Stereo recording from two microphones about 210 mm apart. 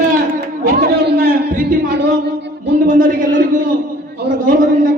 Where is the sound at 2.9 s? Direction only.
40° right (ahead or behind).